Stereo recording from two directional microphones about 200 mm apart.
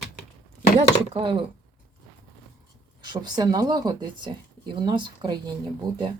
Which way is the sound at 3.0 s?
20° right (ahead or behind).